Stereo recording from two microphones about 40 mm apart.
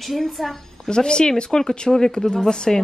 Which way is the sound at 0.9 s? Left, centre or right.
Left.